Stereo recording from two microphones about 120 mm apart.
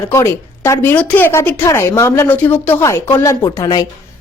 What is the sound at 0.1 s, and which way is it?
Speech, 20° left (ahead or behind).